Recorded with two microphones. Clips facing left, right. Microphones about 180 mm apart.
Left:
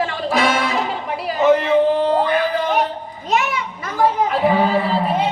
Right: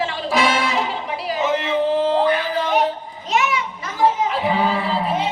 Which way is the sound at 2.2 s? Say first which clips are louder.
Left 1 dB; 55° left (ahead or behind).